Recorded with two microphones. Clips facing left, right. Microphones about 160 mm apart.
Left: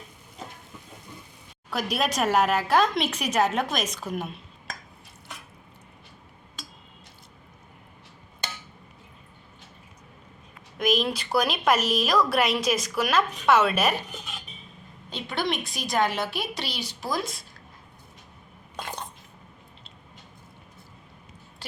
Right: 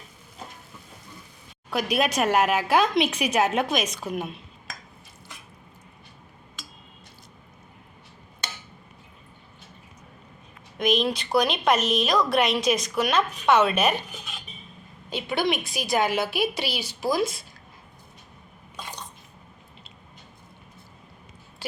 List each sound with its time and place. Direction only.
1.7 s a woman's voice: centre (ahead or behind)
10.8 s a woman's voice: centre (ahead or behind)
18.8 s dishes: 55° left (ahead or behind)